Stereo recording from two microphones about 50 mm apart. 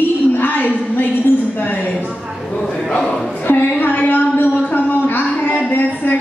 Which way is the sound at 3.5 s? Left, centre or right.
Left.